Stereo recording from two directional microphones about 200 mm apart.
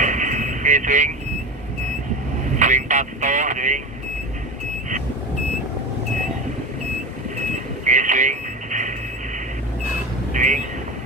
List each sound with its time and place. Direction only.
0.0 s vehicle: 40° right (ahead or behind)
2.5 s speech: 40° right (ahead or behind)
7.8 s radio: 40° right (ahead or behind)
10.3 s vehicle: 40° right (ahead or behind)